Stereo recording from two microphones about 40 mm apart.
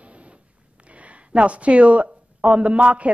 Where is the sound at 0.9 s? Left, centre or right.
Right.